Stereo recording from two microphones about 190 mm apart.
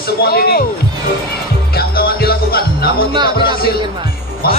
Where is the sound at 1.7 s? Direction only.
55° left (ahead or behind).